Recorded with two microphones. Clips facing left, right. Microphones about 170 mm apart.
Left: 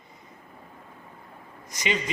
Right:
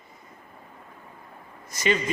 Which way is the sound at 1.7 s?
15° left (ahead or behind).